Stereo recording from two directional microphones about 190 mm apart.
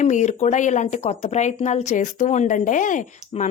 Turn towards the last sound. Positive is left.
turn(degrees=40)  # may be behind; listen again after turning